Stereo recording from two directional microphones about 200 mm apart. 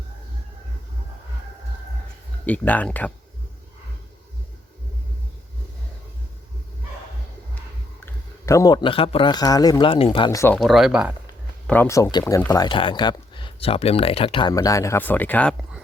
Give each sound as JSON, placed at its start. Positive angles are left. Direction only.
{"t": 2.5, "sound": "speech", "side_deg": 5}
{"t": 8.0, "sound": "speech", "side_deg": 15}
{"t": 10.6, "sound": "speech", "side_deg": 0}
{"t": 11.6, "sound": "speech", "side_deg": 10}